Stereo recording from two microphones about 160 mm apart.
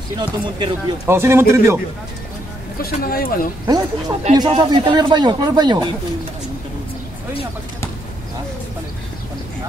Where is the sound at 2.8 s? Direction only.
65° left (ahead or behind).